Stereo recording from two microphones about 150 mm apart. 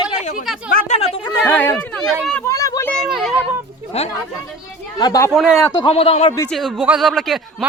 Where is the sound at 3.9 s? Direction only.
45° left (ahead or behind).